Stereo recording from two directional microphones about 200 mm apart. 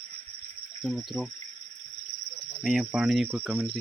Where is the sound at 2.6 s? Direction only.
Centre (ahead or behind).